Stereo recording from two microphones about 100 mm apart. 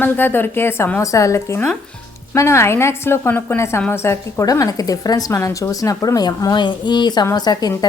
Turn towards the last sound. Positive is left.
turn(degrees=40)  # may be behind; listen again after turning